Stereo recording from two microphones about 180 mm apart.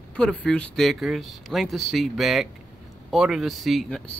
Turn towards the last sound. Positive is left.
turn(degrees=5)  # may be behind; listen again after turning